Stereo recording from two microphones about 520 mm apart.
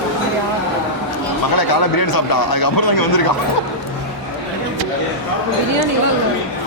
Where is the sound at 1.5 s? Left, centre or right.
Left.